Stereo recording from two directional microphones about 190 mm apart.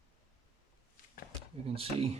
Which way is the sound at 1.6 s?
30° right (ahead or behind).